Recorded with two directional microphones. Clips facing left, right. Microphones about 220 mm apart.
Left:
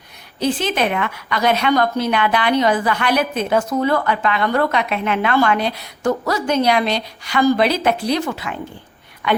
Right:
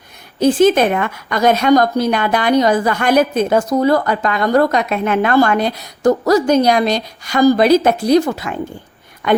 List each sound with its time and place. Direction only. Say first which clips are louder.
0.3 s a woman's voice: right 9 dB; 45° right (ahead or behind)